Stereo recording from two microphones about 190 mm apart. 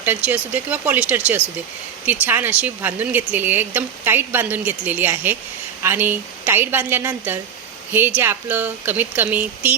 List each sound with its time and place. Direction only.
0.0 s speech: 10° right (ahead or behind)